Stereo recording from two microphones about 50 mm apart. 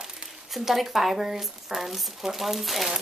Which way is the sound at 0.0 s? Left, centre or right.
Centre.